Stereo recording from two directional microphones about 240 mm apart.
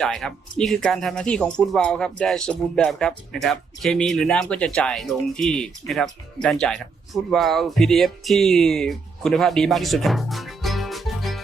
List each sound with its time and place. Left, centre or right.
0.0 s speech: centre